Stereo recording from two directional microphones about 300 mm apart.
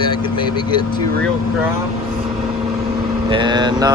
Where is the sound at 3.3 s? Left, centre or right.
Centre.